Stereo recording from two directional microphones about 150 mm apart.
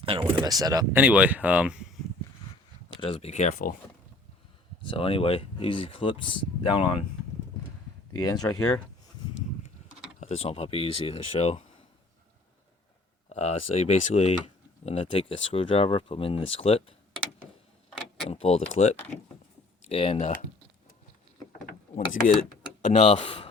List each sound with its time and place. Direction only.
0.0 s speech: 35° right (ahead or behind)
0.9 s speech: 10° right (ahead or behind)
3.0 s speech: 40° left (ahead or behind); by 3.8 s 60° left (ahead or behind)
4.9 s speech: 40° left (ahead or behind)
8.4 s speech: 20° left (ahead or behind)
10.2 s speech: 45° left (ahead or behind)
13.3 s speech: 45° left (ahead or behind)
18.3 s speech: 45° left (ahead or behind)
21.9 s mechanisms: 60° left (ahead or behind)
22.8 s speech: 45° left (ahead or behind)